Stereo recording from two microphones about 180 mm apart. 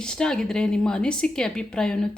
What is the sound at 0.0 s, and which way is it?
A woman's voice, 5° left (ahead or behind).